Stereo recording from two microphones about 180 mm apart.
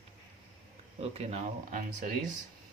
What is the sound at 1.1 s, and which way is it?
Speech, 35° right (ahead or behind).